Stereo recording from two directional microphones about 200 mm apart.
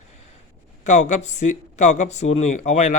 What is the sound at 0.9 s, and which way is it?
Speech, 35° left (ahead or behind).